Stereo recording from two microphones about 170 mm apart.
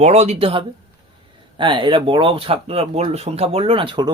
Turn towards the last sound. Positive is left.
turn(degrees=-25)  # may be behind; listen again after turning